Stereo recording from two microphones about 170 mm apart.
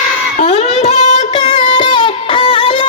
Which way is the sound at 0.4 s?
35° left (ahead or behind).